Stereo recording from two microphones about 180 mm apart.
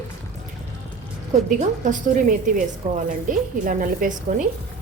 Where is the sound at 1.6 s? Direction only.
45° right (ahead or behind).